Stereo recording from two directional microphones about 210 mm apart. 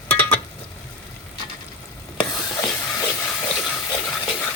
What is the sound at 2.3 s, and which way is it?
Stir, 15° left (ahead or behind).